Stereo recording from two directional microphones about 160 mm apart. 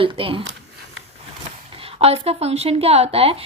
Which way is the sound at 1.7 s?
35° right (ahead or behind).